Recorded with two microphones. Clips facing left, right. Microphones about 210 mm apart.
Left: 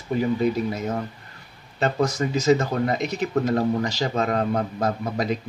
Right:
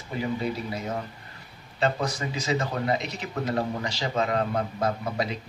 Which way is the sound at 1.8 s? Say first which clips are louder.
Left 4 dB; 45° left (ahead or behind).